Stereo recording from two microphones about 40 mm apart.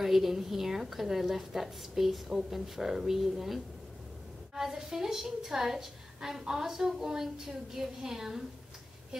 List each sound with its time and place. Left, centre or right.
0.0 s a woman's voice: centre